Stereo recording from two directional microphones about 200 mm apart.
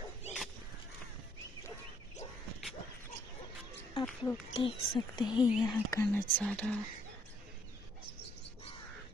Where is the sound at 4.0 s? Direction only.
5° left (ahead or behind).